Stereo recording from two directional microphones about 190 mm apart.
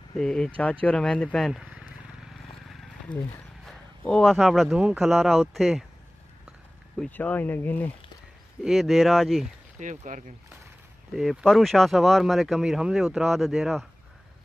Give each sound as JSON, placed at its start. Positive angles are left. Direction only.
{"t": 0.1, "sound": "speech", "side_deg": 5}
{"t": 2.7, "sound": "wild animals", "side_deg": 0}
{"t": 3.6, "sound": "speech", "side_deg": 5}
{"t": 7.0, "sound": "speech", "side_deg": 10}
{"t": 8.6, "sound": "speech", "side_deg": 0}
{"t": 9.8, "sound": "speech", "side_deg": -40}
{"t": 11.1, "sound": "speech", "side_deg": 0}